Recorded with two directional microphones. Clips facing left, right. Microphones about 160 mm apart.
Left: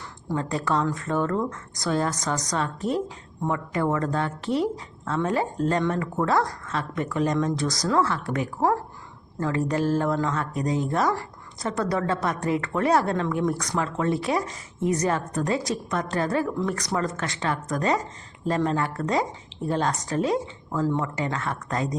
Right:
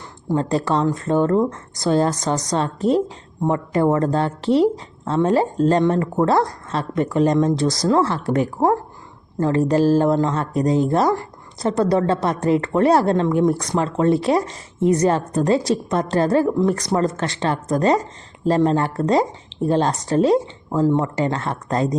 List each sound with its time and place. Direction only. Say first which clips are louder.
0.3 s speech: right 6 dB; 30° right (ahead or behind)